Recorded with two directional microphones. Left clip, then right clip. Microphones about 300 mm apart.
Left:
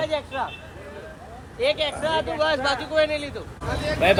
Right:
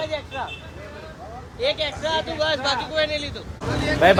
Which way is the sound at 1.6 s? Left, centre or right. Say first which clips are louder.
Left 1 dB; left.